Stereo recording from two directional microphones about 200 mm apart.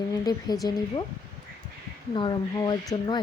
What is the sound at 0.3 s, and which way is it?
Speech, 20° left (ahead or behind).